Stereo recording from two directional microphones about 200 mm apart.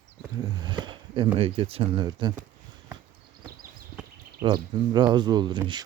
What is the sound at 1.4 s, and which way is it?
Speech, 30° right (ahead or behind).